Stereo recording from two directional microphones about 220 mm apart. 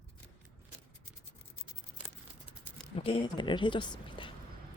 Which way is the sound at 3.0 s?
25° left (ahead or behind).